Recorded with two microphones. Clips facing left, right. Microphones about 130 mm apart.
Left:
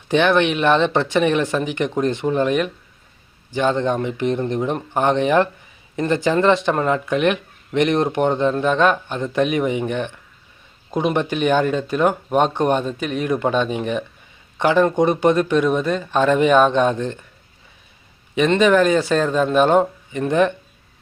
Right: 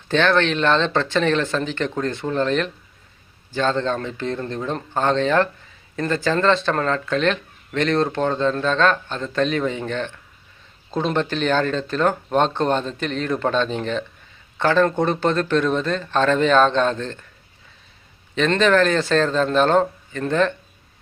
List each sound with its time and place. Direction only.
0.1 s speech: 15° left (ahead or behind)
18.3 s speech: 10° left (ahead or behind)